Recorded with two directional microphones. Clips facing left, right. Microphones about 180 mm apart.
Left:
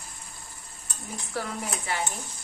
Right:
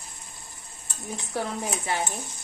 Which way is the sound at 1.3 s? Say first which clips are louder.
Right 3 dB; 20° right (ahead or behind).